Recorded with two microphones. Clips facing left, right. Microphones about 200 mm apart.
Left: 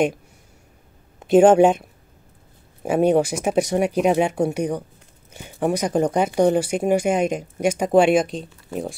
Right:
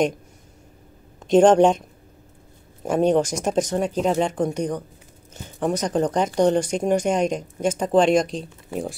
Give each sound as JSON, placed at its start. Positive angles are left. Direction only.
{"t": 1.2, "sound": "speech", "side_deg": 5}